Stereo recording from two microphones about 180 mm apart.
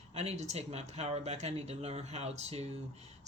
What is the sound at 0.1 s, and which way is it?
Speech, 40° right (ahead or behind).